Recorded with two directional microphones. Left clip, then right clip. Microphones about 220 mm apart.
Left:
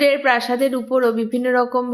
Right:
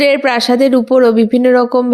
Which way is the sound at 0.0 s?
35° right (ahead or behind).